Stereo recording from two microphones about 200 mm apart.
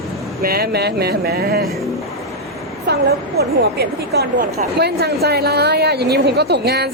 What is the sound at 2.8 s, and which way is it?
A woman's voice, 55° right (ahead or behind).